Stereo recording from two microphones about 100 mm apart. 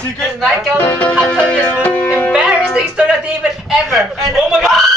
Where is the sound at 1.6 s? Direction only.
15° left (ahead or behind).